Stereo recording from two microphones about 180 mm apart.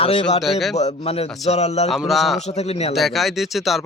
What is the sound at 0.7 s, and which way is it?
Speech, 35° left (ahead or behind).